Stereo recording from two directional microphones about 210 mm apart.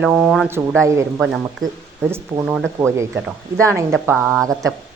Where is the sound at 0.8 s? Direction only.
15° right (ahead or behind).